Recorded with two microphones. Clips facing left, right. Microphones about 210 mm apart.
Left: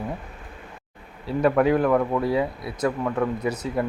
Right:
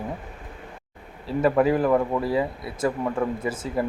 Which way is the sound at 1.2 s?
Centre (ahead or behind).